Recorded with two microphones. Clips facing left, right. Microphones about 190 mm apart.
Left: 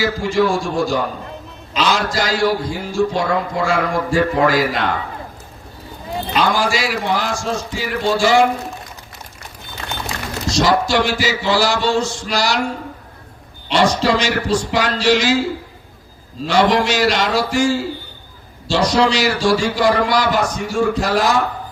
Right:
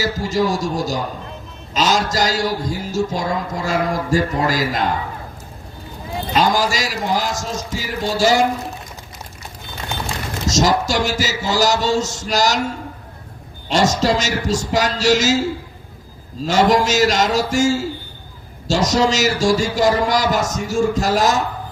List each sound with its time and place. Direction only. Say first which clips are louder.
0.0 s a man's voice: left 2 dB; 40° right (ahead or behind)
6.3 s a man's voice: even; 40° right (ahead or behind)
10.4 s a man's voice: left 1 dB; 40° right (ahead or behind)
16.5 s a man's voice: even; 45° right (ahead or behind)